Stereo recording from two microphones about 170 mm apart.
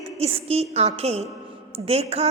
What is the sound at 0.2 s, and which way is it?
A woman's voice, 35° right (ahead or behind).